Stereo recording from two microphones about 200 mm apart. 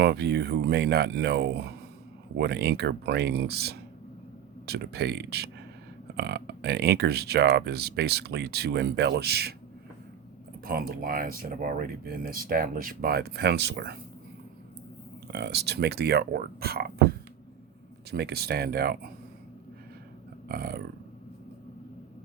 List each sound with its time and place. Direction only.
0.0 s speech: 55° right (ahead or behind)
10.7 s speech: 45° right (ahead or behind)
15.3 s speech: 55° right (ahead or behind)
20.5 s speech: 50° right (ahead or behind)